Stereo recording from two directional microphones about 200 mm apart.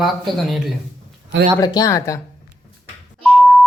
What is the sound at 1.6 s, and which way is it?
Speech, 20° left (ahead or behind).